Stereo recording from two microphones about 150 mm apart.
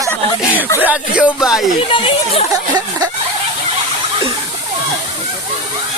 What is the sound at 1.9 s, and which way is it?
Speech, 35° left (ahead or behind).